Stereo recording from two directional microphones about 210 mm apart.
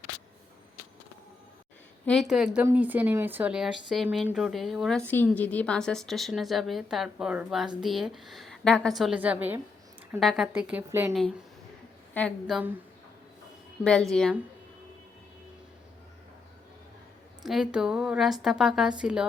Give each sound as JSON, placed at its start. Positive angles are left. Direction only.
{"t": 2.0, "sound": "speech", "side_deg": 0}
{"t": 12.1, "sound": "speech", "side_deg": 5}
{"t": 14.1, "sound": "speech", "side_deg": 5}
{"t": 17.4, "sound": "speech", "side_deg": 0}